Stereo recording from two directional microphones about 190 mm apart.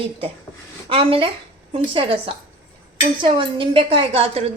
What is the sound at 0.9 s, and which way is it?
A woman's voice, 30° right (ahead or behind).